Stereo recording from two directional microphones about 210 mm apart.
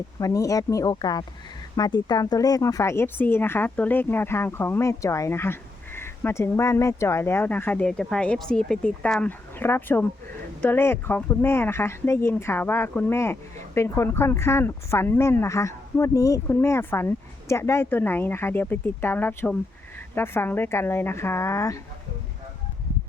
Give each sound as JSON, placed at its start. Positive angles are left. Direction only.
{"t": 0.2, "sound": "speech", "side_deg": 15}